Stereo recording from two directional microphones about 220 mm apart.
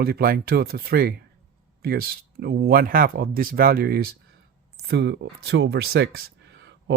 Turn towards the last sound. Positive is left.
turn(degrees=-50)  # may be behind; listen again after turning